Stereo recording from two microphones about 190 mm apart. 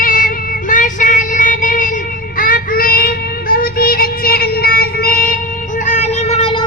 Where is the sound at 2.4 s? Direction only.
45° left (ahead or behind).